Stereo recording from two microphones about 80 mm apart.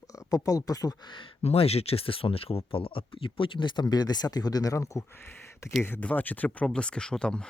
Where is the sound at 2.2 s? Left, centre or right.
Left.